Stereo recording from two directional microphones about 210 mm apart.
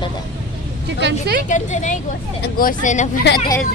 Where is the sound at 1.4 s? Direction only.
35° left (ahead or behind).